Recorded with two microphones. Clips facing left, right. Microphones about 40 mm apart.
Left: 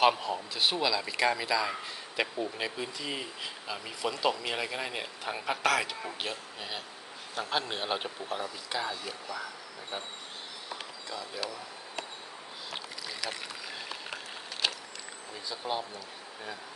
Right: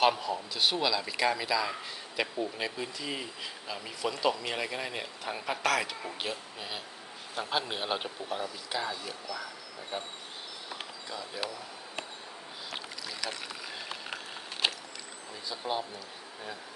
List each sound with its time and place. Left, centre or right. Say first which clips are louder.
0.0 s speech: left 1 dB; centre
10.8 s speech: right 1 dB; centre
12.7 s boat: even; centre
14.6 s boat: right 1 dB; right
15.4 s speech: even; centre